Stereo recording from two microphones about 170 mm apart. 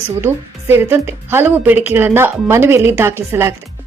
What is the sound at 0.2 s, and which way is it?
A woman's voice, 15° right (ahead or behind).